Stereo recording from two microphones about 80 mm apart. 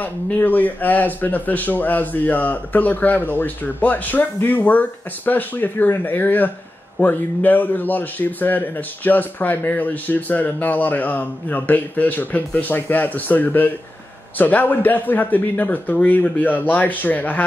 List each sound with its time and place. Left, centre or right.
0.0 s a man's voice: left